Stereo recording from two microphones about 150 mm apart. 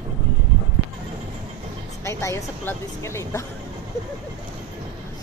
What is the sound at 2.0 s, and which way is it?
Speech, 20° left (ahead or behind).